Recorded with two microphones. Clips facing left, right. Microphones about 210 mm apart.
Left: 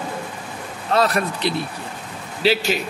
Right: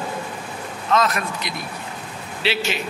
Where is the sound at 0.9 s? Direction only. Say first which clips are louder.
Left 2 dB; 35° left (ahead or behind).